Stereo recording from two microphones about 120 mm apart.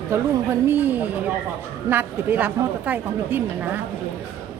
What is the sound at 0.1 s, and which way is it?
A woman's voice, 25° right (ahead or behind).